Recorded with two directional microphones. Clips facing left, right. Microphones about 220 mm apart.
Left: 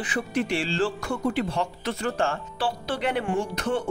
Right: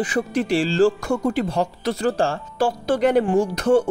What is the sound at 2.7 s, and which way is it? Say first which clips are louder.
Speech: right 9 dB; 45° right (ahead or behind).